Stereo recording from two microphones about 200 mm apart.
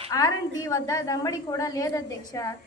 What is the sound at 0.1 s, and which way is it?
A woman's voice, 20° left (ahead or behind).